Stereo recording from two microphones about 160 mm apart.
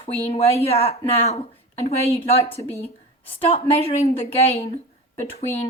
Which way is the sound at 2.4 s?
20° left (ahead or behind).